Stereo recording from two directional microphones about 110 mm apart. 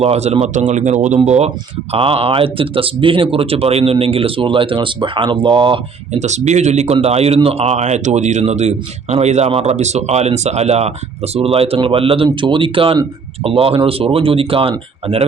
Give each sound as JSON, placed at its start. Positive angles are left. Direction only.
{"t": 0.0, "sound": "speech", "side_deg": -70}
{"t": 0.4, "sound": "speech", "side_deg": -90}
{"t": 1.9, "sound": "speech", "side_deg": -60}
{"t": 6.1, "sound": "speech", "side_deg": -90}
{"t": 6.9, "sound": "speech", "side_deg": -70}
{"t": 9.5, "sound": "speech", "side_deg": -70}